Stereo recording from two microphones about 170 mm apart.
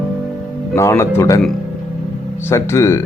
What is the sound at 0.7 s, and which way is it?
Speech, 15° left (ahead or behind).